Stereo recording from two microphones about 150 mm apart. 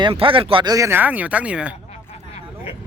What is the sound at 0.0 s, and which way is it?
Speech, 35° right (ahead or behind).